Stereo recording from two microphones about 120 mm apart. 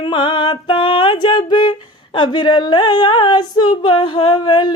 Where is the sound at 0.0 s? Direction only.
40° left (ahead or behind).